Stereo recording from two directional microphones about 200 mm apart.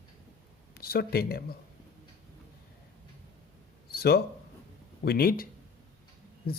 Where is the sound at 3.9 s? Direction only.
50° left (ahead or behind).